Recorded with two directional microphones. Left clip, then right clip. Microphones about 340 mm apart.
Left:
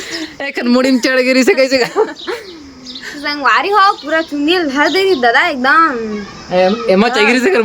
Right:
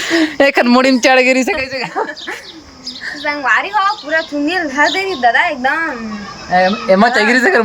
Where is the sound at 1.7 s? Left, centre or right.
Left.